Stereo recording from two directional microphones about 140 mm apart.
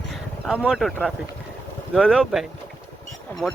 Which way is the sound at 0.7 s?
Centre (ahead or behind).